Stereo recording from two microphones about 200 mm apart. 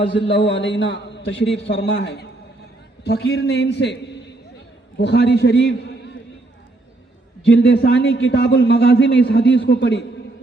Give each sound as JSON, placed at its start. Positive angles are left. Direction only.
{"t": 0.1, "sound": "a man's voice", "side_deg": 60}
{"t": 7.4, "sound": "a man's voice", "side_deg": 60}